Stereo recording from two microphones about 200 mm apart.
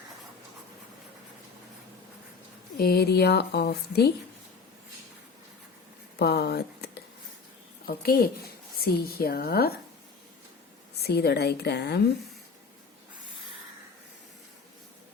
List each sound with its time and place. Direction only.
2.7 s a woman's voice: 50° left (ahead or behind)
6.1 s a woman's voice: 55° left (ahead or behind)
11.0 s a woman's voice: 55° left (ahead or behind)